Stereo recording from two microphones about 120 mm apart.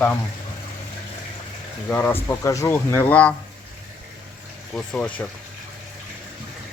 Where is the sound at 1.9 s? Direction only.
15° left (ahead or behind).